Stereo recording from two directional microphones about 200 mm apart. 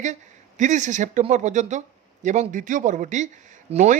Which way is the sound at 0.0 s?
35° right (ahead or behind).